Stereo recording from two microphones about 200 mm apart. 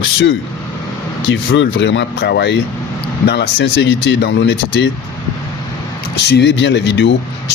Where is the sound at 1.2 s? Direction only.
70° left (ahead or behind).